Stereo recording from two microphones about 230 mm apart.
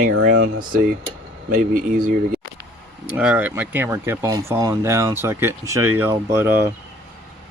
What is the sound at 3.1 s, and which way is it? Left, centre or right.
Speech, centre.